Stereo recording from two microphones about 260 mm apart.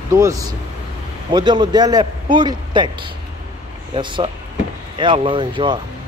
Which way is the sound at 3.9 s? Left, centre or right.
Centre.